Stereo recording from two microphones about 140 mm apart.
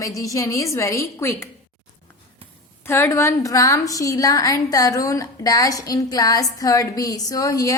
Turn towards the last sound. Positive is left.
turn(degrees=25)  # may be behind; listen again after turning